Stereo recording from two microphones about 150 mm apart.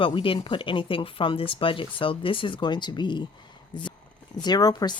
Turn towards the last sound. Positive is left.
turn(degrees=25)  # may be behind; listen again after turning